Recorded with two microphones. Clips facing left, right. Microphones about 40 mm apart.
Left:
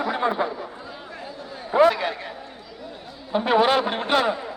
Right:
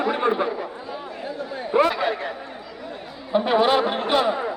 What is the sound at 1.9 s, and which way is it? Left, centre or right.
Speech, centre.